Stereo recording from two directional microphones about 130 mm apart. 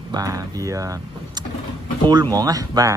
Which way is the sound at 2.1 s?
30° right (ahead or behind).